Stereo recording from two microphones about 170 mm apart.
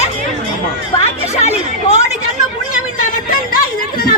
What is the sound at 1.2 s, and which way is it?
Chatter, 40° left (ahead or behind).